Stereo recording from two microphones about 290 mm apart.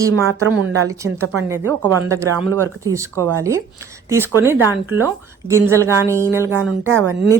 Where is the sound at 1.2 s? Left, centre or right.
Right.